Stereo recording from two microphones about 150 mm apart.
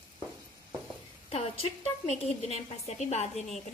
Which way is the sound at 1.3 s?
40° left (ahead or behind).